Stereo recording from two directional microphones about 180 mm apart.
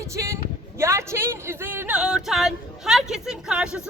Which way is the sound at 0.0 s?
15° right (ahead or behind).